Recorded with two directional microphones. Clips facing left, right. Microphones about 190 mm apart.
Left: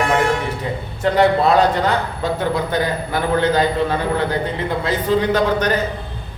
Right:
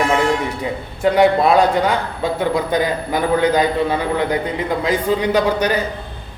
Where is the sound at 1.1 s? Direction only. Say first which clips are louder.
Right 1 dB; 10° right (ahead or behind).